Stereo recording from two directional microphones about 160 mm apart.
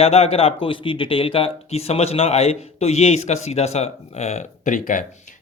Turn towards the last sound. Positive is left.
turn(degrees=50)  # may be behind; listen again after turning